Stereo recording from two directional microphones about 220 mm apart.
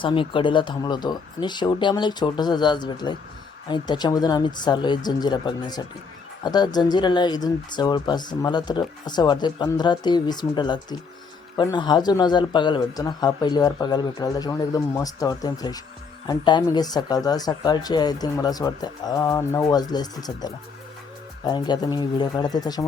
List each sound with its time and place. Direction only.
0.0 s speech: 20° left (ahead or behind)